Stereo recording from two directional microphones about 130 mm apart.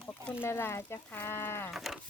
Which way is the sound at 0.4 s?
15° left (ahead or behind).